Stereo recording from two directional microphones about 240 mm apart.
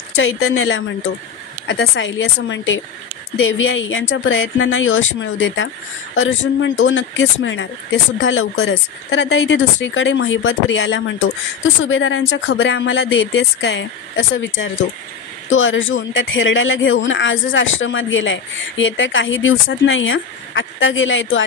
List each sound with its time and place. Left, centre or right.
0.1 s a woman's voice: left